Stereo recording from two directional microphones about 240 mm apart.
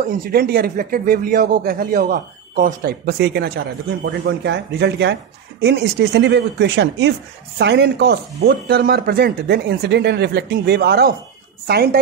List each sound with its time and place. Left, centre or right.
0.2 s speech: right